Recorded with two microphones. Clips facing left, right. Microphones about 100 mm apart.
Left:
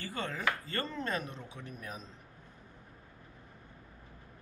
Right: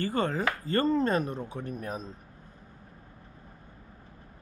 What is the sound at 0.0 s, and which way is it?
Speech, 45° right (ahead or behind).